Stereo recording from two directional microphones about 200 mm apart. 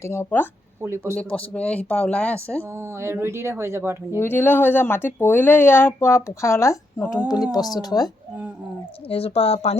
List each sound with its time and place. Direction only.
0.0 s speech: 10° left (ahead or behind)
0.8 s speech: 15° right (ahead or behind)
1.1 s speech: 5° left (ahead or behind)
2.7 s speech: 15° right (ahead or behind)
4.2 s speech: 10° left (ahead or behind)
9.0 s speech: 30° left (ahead or behind)